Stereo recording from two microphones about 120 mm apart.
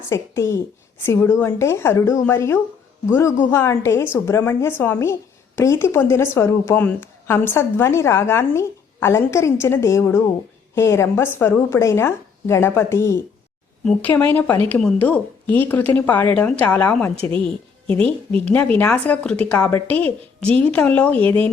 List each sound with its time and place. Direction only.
0.1 s a woman's voice: 25° left (ahead or behind)
13.8 s a woman's voice: 10° left (ahead or behind)